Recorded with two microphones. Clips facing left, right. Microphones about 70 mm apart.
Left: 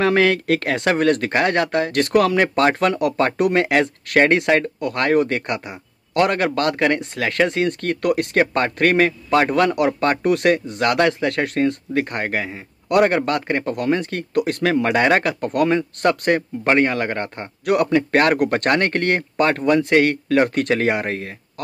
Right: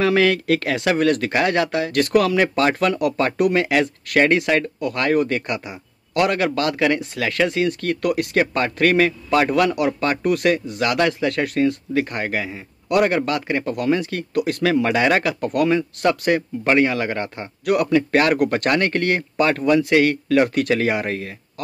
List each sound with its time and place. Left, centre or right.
0.0 s speech: left
2.9 s speech: left
6.1 s speech: left
9.9 s speech: left
12.4 s speech: centre
12.8 s speech: left
19.5 s speech: left
19.8 s speech: left
21.1 s speech: left